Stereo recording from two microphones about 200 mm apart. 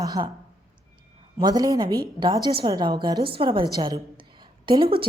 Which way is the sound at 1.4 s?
20° right (ahead or behind).